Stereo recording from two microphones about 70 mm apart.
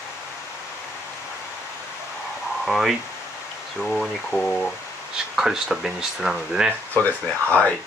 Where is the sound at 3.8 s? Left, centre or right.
Centre.